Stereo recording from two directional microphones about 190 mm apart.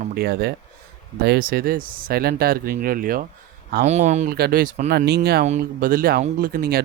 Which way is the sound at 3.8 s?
35° right (ahead or behind).